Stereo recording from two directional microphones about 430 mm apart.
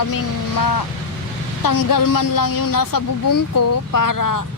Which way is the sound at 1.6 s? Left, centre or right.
Left.